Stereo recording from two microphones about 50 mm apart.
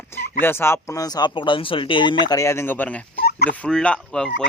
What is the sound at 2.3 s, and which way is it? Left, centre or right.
Speech, left.